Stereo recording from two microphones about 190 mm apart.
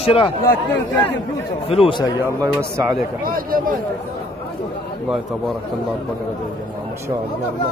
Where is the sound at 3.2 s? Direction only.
50° right (ahead or behind).